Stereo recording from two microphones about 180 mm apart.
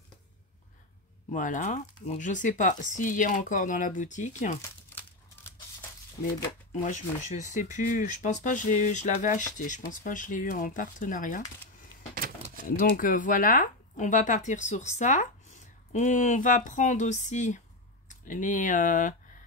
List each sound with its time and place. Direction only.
1.3 s speech: 45° left (ahead or behind)
4.6 s crumpling: 15° left (ahead or behind)
6.7 s speech: 40° left (ahead or behind)
12.6 s speech: 50° left (ahead or behind)